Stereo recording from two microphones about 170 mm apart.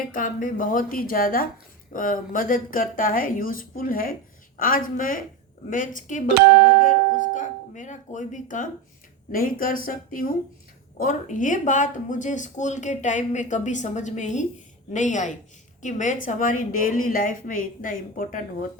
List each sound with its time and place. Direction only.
0.1 s a woman's voice: 50° left (ahead or behind)
6.3 s speech: 70° right (ahead or behind)
7.3 s a woman's voice: 45° left (ahead or behind)